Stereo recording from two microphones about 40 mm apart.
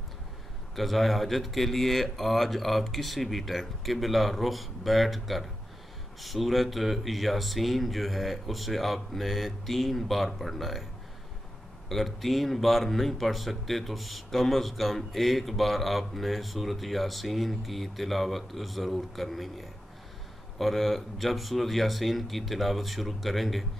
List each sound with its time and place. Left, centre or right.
0.7 s speech: centre
11.9 s speech: centre